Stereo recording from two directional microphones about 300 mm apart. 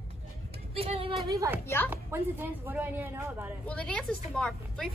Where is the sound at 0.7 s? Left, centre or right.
Centre.